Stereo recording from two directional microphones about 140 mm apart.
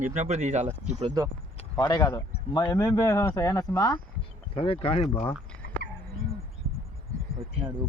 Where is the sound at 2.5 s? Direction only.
30° left (ahead or behind).